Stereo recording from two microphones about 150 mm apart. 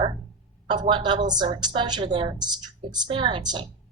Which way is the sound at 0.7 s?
30° right (ahead or behind).